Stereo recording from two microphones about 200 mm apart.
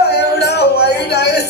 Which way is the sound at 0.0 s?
55° left (ahead or behind).